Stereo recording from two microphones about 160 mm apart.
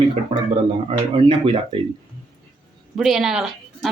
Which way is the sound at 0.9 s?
35° right (ahead or behind).